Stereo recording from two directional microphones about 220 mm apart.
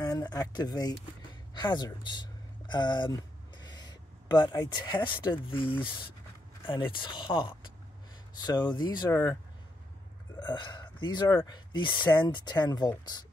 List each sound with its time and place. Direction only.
0.0 s speech: 15° left (ahead or behind)
10.4 s speech: 20° left (ahead or behind)